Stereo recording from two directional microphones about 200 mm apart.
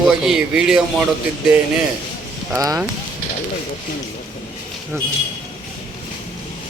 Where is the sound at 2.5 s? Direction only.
15° right (ahead or behind).